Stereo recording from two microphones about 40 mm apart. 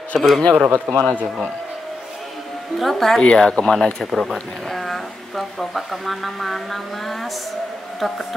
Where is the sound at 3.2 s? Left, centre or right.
Left.